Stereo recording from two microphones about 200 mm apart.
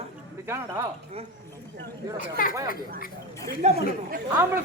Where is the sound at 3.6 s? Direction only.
35° right (ahead or behind).